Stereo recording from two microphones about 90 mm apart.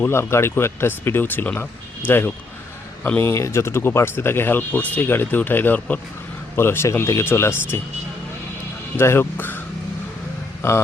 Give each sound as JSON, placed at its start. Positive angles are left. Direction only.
{"t": 0.0, "sound": "speech", "side_deg": 30}
{"t": 9.0, "sound": "speech", "side_deg": 25}
{"t": 10.6, "sound": "speech", "side_deg": 30}